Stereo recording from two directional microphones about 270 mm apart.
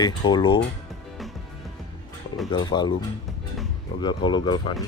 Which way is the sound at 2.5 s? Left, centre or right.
Centre.